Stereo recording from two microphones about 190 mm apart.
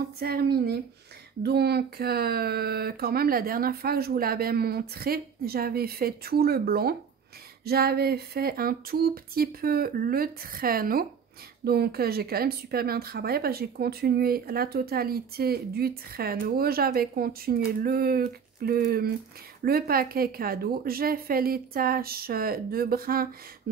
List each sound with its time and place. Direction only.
0.2 s speech: 55° right (ahead or behind)